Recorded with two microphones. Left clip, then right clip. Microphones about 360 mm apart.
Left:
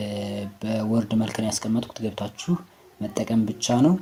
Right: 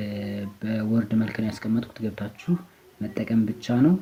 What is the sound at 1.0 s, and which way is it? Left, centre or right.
Speech, centre.